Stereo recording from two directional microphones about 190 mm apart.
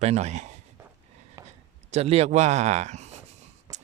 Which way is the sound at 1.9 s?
35° right (ahead or behind).